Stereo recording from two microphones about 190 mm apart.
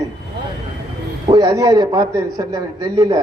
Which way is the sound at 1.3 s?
20° right (ahead or behind).